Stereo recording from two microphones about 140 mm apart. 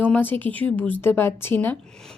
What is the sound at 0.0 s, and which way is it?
Speech, 10° left (ahead or behind).